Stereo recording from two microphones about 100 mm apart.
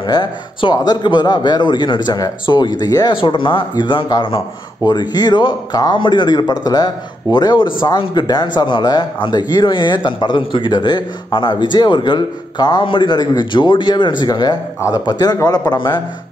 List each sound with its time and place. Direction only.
0.0 s a man's voice: 50° left (ahead or behind)
2.4 s a man's voice: 50° left (ahead or behind)
3.2 s a man's voice: 55° left (ahead or behind)
4.8 s a man's voice: 45° left (ahead or behind)